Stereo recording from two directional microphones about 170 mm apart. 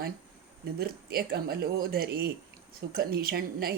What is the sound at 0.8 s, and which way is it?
A woman's voice, 60° right (ahead or behind).